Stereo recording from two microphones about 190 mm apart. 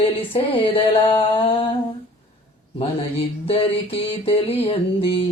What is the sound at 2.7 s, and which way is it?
Mantra, 30° left (ahead or behind).